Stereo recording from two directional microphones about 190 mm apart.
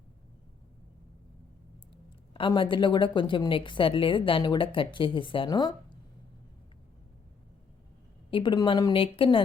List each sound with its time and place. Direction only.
2.3 s a woman's voice: 25° left (ahead or behind)
8.3 s a woman's voice: 25° left (ahead or behind)